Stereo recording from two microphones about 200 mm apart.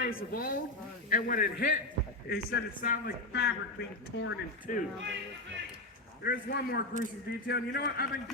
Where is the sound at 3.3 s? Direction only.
60° left (ahead or behind).